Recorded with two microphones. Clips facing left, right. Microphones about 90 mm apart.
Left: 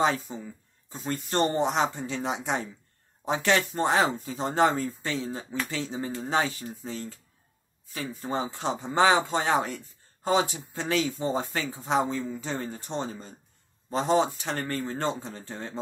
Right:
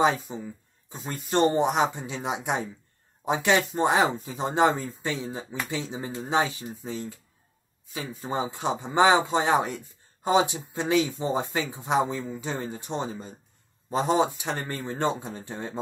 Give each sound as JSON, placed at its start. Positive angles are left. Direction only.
{"t": 0.0, "sound": "speech", "side_deg": -15}
{"t": 1.4, "sound": "speech", "side_deg": -5}